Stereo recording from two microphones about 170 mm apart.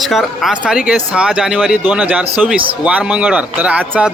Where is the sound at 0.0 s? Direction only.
Centre (ahead or behind).